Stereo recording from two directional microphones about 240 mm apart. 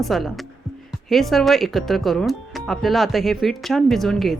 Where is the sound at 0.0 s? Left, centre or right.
Centre.